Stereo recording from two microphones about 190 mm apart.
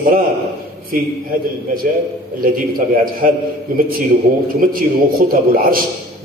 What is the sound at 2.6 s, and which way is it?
A man's voice, 45° right (ahead or behind).